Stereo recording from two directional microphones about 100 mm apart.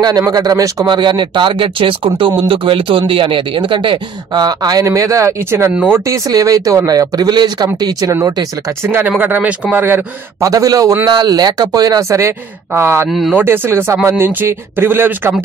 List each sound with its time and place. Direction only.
0.3 s speech: 40° right (ahead or behind)
8.8 s speech: 25° right (ahead or behind)
10.4 s speech: 35° right (ahead or behind)